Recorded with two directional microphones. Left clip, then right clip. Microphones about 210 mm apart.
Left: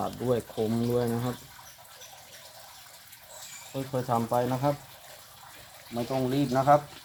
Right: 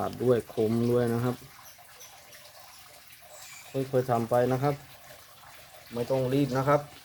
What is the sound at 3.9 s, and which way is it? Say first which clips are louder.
Speech: right 2 dB; 45° right (ahead or behind).